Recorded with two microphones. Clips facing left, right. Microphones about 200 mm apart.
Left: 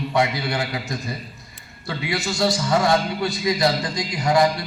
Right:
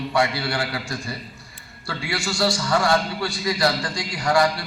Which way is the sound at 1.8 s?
20° left (ahead or behind).